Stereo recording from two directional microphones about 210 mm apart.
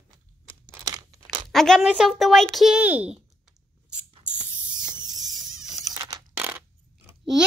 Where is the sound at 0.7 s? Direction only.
15° right (ahead or behind).